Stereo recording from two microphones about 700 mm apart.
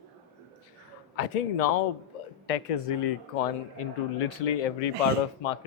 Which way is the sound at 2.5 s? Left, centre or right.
Left.